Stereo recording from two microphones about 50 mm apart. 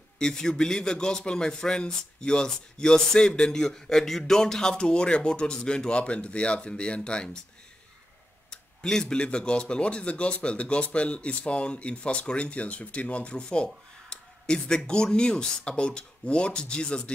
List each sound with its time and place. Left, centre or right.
0.2 s a man's voice: centre
8.5 s speech: centre
14.0 s a sound: centre
14.9 s speech: centre